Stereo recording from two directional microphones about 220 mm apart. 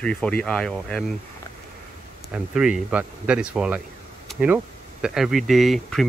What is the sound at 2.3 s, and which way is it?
Speech, 5° right (ahead or behind).